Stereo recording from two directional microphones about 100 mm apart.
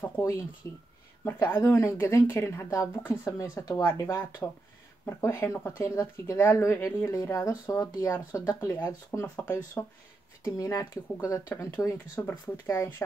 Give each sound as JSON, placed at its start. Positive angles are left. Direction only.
{"t": 0.2, "sound": "speech", "side_deg": 35}
{"t": 10.4, "sound": "speech", "side_deg": 35}